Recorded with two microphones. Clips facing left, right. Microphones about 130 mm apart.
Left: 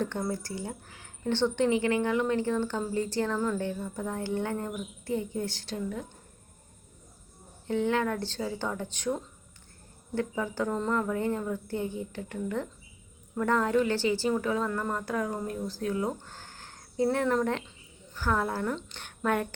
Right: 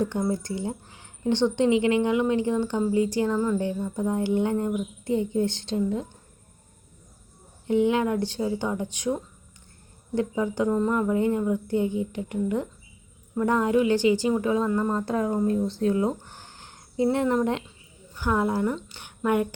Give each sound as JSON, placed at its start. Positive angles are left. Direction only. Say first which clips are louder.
{"t": 0.0, "sound": "a woman's voice", "louder": "right 5 dB", "side_deg": -15}
{"t": 7.7, "sound": "a woman's voice", "louder": "right 5 dB", "side_deg": -15}